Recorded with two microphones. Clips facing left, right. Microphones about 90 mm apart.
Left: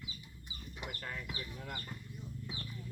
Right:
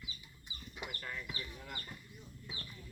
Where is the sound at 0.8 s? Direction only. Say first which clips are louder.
Left 1 dB; 40° left (ahead or behind).